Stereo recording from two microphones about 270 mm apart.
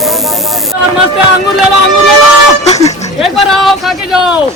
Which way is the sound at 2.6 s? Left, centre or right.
Left.